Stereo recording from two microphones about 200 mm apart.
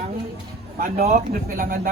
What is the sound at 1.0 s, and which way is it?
Speech, 40° right (ahead or behind).